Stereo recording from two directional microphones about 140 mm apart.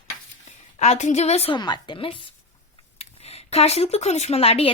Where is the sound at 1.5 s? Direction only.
30° left (ahead or behind).